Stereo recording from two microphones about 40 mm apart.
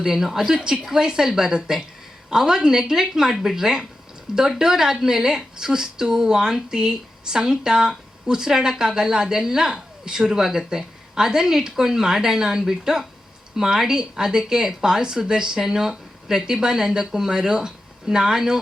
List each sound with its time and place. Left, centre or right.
0.0 s a woman's voice: centre